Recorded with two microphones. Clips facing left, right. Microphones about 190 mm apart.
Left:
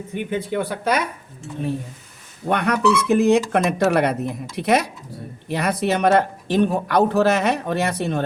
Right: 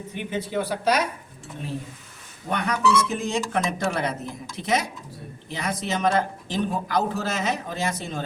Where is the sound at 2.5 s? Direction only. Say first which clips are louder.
Left 4 dB; 65° left (ahead or behind).